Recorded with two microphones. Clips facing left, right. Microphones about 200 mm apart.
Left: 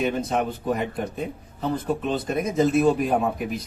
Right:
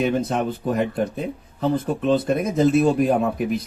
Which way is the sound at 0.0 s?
55° right (ahead or behind).